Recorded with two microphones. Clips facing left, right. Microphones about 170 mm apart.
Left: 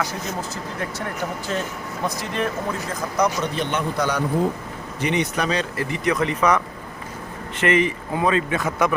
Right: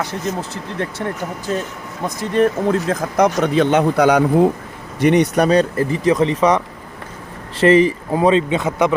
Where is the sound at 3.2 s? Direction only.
65° right (ahead or behind).